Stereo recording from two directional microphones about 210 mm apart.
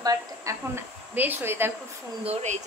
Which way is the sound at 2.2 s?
30° right (ahead or behind).